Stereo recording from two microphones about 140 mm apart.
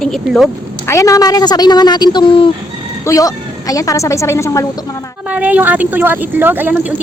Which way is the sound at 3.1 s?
25° left (ahead or behind).